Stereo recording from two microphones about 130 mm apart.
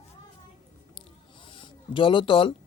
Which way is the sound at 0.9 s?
40° left (ahead or behind).